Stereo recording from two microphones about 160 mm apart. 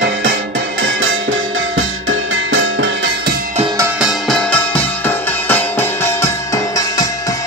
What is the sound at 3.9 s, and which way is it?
Music, 5° right (ahead or behind).